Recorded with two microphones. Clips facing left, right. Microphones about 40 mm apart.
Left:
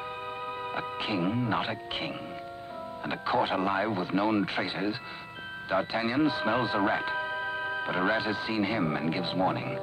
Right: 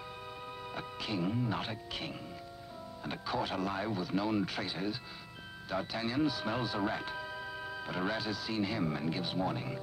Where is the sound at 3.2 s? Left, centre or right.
Left.